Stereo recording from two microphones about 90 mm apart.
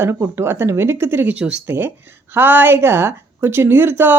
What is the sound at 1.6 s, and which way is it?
Speech, 25° right (ahead or behind).